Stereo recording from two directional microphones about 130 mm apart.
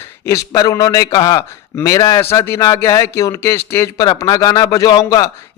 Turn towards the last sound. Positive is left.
turn(degrees=30)  # may be behind; listen again after turning